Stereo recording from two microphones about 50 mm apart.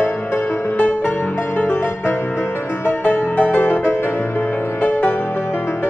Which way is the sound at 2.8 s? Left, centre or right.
Left.